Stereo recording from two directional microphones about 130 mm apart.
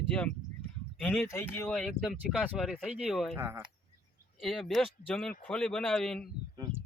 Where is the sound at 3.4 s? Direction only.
20° right (ahead or behind).